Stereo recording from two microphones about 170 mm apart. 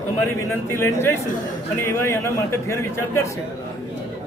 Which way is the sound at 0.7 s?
15° left (ahead or behind).